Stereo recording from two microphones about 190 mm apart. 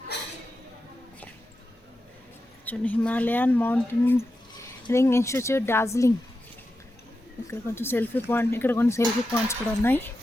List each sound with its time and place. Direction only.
0.1 s a sound: 65° left (ahead or behind)
2.6 s speech: 10° left (ahead or behind)
7.8 s speech: 10° left (ahead or behind)